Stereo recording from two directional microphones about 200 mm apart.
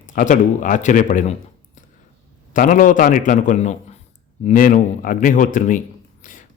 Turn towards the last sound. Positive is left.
turn(degrees=40)  # may be behind; listen again after turning